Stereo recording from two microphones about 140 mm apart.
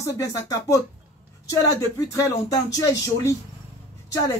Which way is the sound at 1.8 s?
25° left (ahead or behind).